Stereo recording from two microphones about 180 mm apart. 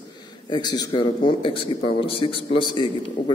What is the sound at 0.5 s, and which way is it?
A man's voice, 25° left (ahead or behind).